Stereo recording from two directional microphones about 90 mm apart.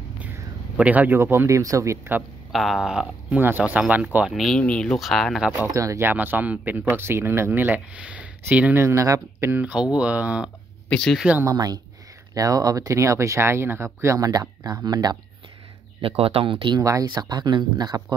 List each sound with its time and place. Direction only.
0.7 s speech: 15° right (ahead or behind); by 2.0 s 35° right (ahead or behind)
2.5 s speech: centre (ahead or behind)
3.3 s speech: 20° right (ahead or behind)
4.3 s speech: 5° left (ahead or behind)
4.9 s speech: centre (ahead or behind)
5.7 s speech: 35° right (ahead or behind)
6.0 s speech: 20° right (ahead or behind)
8.7 s speech: 35° right (ahead or behind)
9.5 s speech: 20° right (ahead or behind)
10.9 s speech: 10° left (ahead or behind)
11.4 s speech: 45° right (ahead or behind)
16.0 s speech: 90° right; by 16.8 s 60° right (ahead or behind)
16.8 s speech: 45° right (ahead or behind)